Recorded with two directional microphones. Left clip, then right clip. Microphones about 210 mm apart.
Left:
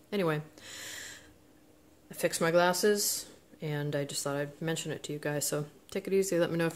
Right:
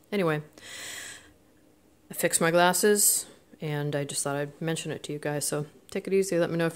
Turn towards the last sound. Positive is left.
turn(degrees=-20)  # may be behind; listen again after turning